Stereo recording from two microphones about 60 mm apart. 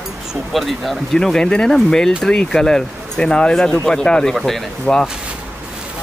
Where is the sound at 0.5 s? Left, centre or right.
Centre.